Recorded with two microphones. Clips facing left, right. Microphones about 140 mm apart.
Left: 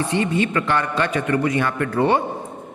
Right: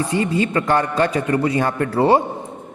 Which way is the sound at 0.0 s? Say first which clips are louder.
Right 1 dB; 35° right (ahead or behind).